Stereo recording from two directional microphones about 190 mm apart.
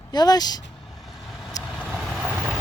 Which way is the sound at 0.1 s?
20° left (ahead or behind).